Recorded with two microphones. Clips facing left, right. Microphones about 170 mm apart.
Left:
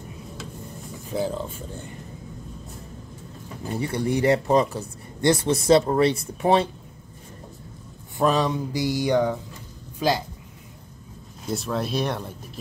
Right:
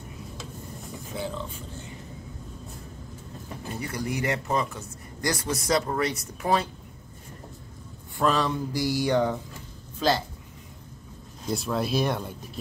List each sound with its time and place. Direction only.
1.1 s speech: 40° left (ahead or behind)
3.7 s speech: 30° left (ahead or behind)
8.2 s mantra: 20° left (ahead or behind)
9.9 s speech: 15° left (ahead or behind)
11.4 s speech: centre (ahead or behind)